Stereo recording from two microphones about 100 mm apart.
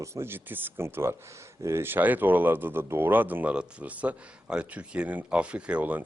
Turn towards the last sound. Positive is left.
turn(degrees=-15)  # may be behind; listen again after turning